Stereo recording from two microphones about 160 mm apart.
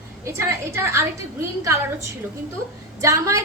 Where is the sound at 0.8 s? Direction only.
15° right (ahead or behind).